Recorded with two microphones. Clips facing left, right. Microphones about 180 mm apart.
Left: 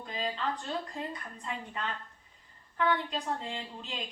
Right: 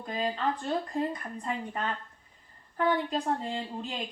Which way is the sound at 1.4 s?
45° right (ahead or behind).